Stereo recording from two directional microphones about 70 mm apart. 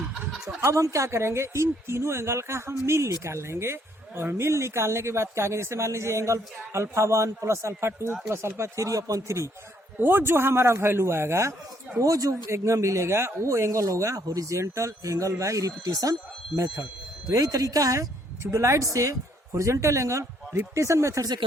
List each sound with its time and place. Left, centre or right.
0.6 s speech: right
10.0 s speech: right
11.9 s speech: right
17.2 s speech: right
18.5 s speech: right